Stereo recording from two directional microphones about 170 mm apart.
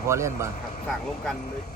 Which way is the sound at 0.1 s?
15° right (ahead or behind).